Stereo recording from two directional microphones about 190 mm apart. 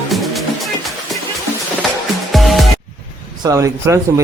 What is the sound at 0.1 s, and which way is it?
Music, centre (ahead or behind).